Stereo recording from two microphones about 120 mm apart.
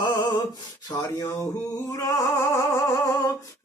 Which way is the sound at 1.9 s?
30° left (ahead or behind).